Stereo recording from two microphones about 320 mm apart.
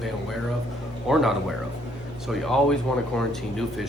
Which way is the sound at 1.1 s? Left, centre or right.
Centre.